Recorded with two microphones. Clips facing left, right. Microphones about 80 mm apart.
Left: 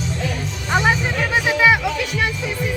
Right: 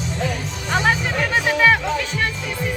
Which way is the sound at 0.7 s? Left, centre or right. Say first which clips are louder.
Left 1 dB; centre.